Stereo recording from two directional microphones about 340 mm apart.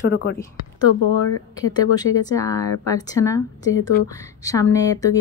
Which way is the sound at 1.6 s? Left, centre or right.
Centre.